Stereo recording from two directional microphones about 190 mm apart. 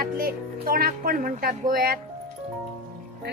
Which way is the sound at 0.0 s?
50° right (ahead or behind).